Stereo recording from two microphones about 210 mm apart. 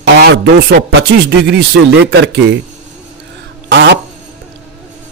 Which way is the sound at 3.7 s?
55° right (ahead or behind).